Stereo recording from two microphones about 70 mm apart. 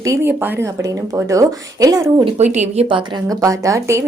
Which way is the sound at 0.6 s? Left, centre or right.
Right.